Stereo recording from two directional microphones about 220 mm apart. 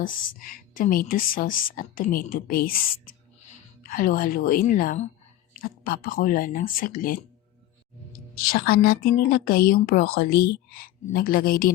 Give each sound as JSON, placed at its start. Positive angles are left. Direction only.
{"t": 0.0, "sound": "a woman's voice", "side_deg": 40}
{"t": 8.4, "sound": "a woman's voice", "side_deg": 45}